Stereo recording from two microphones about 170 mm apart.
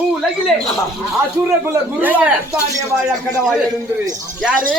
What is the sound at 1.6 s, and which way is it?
A man's voice, 10° right (ahead or behind).